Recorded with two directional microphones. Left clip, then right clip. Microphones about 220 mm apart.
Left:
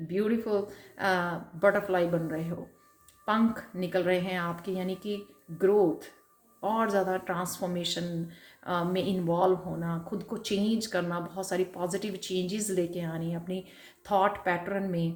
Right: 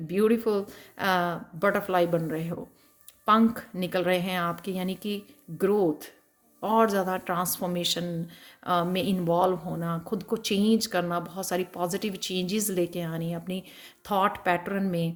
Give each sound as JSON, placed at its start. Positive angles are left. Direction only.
{"t": 0.1, "sound": "speech", "side_deg": -50}